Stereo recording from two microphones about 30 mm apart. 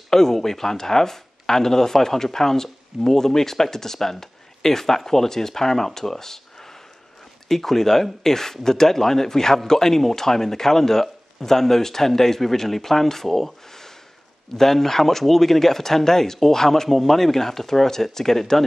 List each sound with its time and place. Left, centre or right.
0.1 s speech: centre
7.4 s speech: centre